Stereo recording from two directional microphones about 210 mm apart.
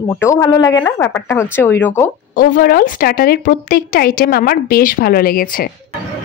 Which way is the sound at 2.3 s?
45° left (ahead or behind).